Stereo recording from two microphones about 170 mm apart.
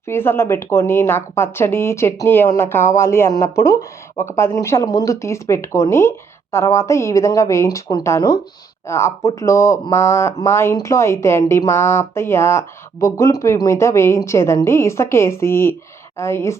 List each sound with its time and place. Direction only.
0.1 s speech: 15° left (ahead or behind)